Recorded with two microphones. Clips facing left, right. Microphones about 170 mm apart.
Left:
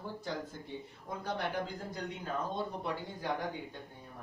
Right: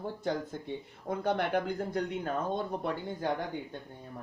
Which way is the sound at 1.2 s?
65° right (ahead or behind).